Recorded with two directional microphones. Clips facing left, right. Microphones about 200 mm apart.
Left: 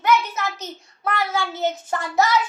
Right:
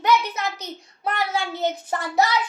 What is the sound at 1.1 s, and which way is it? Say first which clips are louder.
Child singing: left 1 dB; 20° right (ahead or behind).